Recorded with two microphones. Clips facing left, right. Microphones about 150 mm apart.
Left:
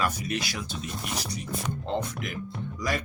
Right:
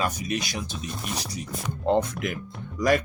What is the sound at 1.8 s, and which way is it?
Speech, 55° right (ahead or behind).